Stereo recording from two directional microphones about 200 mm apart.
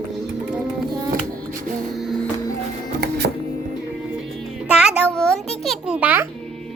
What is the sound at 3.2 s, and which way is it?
Music, 60° right (ahead or behind).